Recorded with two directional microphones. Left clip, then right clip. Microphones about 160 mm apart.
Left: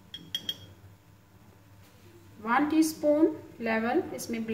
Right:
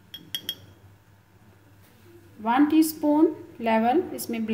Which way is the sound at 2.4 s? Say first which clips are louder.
Right 4 dB; 55° right (ahead or behind).